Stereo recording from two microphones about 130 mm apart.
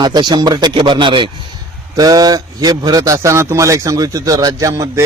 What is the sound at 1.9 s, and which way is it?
A man's voice, 30° right (ahead or behind).